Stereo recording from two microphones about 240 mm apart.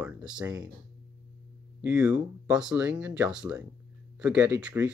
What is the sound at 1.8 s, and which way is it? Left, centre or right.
Speech, centre.